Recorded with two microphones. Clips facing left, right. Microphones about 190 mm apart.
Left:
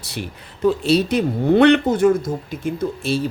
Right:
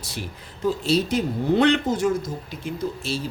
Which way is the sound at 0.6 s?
65° left (ahead or behind).